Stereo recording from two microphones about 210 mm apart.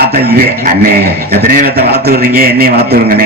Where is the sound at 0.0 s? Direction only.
50° right (ahead or behind).